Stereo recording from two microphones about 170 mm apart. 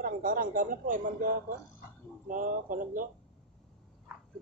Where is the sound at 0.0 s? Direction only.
55° right (ahead or behind).